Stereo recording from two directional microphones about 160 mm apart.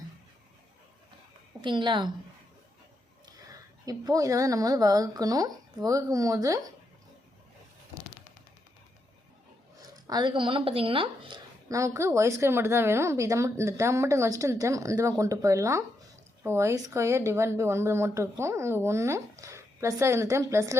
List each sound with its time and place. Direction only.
1.6 s speech: 30° right (ahead or behind)
3.3 s a woman's voice: 25° right (ahead or behind)
9.9 s speech: 25° right (ahead or behind)
11.7 s speech: 20° right (ahead or behind)